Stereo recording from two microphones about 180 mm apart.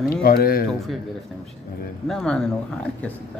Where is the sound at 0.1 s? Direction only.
60° left (ahead or behind).